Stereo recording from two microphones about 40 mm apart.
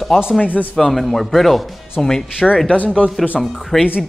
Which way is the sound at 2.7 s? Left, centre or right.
Left.